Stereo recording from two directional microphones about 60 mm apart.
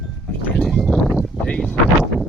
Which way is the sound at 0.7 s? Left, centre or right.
Centre.